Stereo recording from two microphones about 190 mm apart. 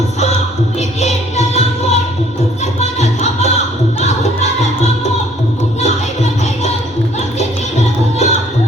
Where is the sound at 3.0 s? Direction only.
35° left (ahead or behind).